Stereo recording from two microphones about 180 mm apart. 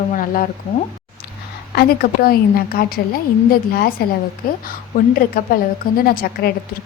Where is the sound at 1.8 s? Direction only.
55° left (ahead or behind).